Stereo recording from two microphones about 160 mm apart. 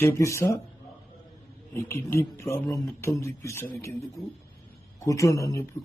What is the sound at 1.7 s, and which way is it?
Speech, 15° left (ahead or behind).